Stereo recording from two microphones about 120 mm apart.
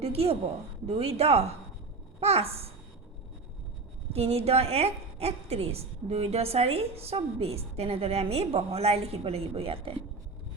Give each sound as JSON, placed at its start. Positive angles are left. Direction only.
{"t": 0.0, "sound": "a woman's voice", "side_deg": -55}
{"t": 4.1, "sound": "a woman's voice", "side_deg": -60}